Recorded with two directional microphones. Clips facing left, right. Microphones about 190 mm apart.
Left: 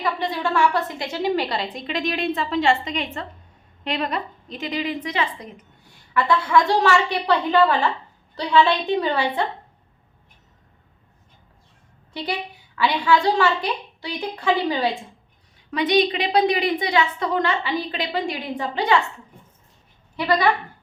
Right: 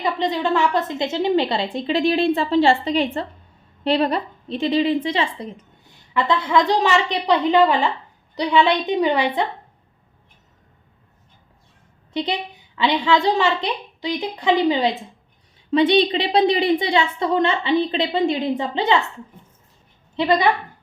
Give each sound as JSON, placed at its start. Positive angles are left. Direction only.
{"t": 0.0, "sound": "a woman's voice", "side_deg": -20}
{"t": 12.1, "sound": "a woman's voice", "side_deg": -20}
{"t": 20.1, "sound": "a woman's voice", "side_deg": -20}